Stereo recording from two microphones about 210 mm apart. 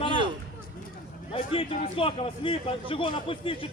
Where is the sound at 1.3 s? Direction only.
25° left (ahead or behind).